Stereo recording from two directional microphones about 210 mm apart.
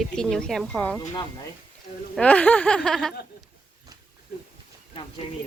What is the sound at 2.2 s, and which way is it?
Speech, 5° left (ahead or behind).